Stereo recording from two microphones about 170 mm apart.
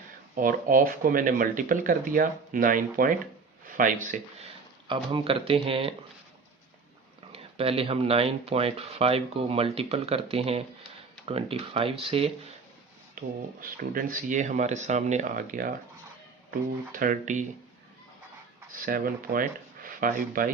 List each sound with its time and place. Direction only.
0.3 s speech: 55° right (ahead or behind)
4.9 s speech: 30° right (ahead or behind)
7.3 s speech: 35° right (ahead or behind)
13.2 s speech: 55° right (ahead or behind)
18.7 s speech: 55° right (ahead or behind)